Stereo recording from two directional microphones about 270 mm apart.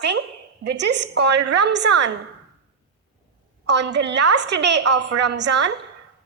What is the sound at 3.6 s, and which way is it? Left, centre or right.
A woman's voice, right.